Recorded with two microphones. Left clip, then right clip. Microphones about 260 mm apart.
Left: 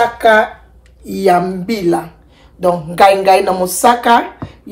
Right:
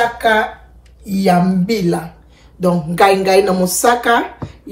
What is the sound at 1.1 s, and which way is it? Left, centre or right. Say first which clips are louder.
Speech: left 3 dB; left.